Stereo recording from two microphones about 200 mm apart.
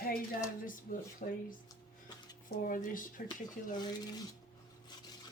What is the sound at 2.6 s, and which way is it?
Speech, 40° left (ahead or behind).